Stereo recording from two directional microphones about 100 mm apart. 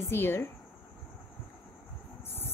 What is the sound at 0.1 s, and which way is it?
Speech, 25° left (ahead or behind).